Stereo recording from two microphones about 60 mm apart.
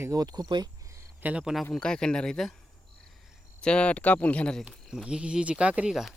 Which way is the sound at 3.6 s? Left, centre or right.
Centre.